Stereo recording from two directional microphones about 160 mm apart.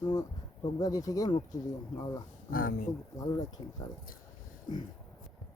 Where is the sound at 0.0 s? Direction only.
25° left (ahead or behind).